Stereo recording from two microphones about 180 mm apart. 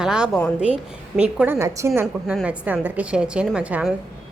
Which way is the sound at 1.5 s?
15° right (ahead or behind).